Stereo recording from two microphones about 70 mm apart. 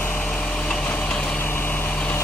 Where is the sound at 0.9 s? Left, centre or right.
Centre.